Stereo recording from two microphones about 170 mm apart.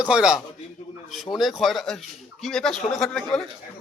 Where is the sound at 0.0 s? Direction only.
5° right (ahead or behind).